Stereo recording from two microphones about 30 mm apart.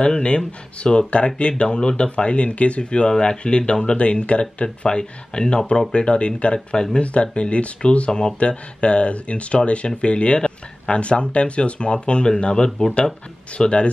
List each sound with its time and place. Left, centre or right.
0.0 s speech: left
2.8 s speech: left
3.8 s speech: left
4.8 s speech: left
7.0 s speech: left
8.1 s speech: left
8.4 s speech: left